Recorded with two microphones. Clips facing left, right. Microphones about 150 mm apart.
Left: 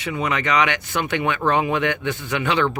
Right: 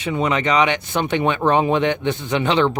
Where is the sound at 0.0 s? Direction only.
25° right (ahead or behind).